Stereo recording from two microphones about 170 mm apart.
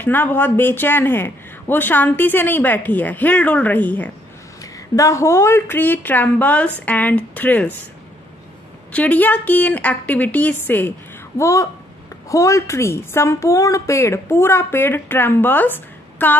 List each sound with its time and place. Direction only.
0.0 s speech: 10° left (ahead or behind)
8.9 s speech: 10° left (ahead or behind)